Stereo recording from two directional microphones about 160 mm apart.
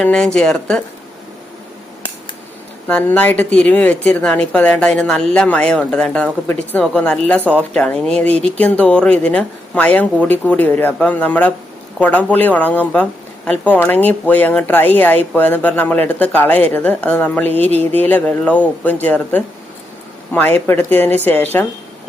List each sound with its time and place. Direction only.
0.0 s speech: 5° left (ahead or behind)
2.8 s speech: 10° left (ahead or behind)